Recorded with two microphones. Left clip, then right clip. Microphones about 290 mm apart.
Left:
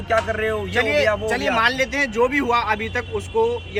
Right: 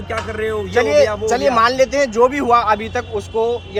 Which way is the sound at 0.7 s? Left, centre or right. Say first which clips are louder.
Right 6 dB; right.